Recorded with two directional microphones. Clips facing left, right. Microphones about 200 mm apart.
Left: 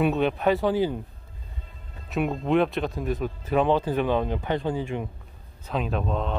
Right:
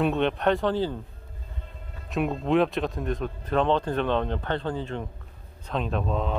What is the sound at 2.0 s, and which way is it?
Speech, centre (ahead or behind).